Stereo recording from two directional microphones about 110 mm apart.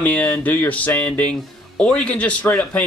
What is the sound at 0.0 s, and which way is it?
Speech, 10° left (ahead or behind).